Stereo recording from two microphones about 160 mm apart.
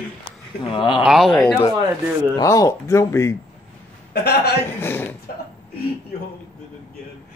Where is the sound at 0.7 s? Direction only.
30° left (ahead or behind).